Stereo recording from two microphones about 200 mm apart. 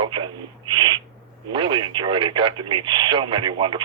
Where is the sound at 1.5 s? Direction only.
25° right (ahead or behind).